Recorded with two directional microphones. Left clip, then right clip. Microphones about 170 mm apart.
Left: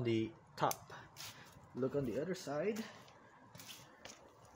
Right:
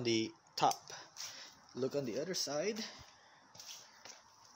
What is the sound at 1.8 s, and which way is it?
Speech, 25° right (ahead or behind).